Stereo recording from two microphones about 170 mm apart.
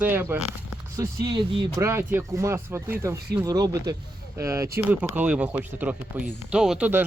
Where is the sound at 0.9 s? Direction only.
25° right (ahead or behind).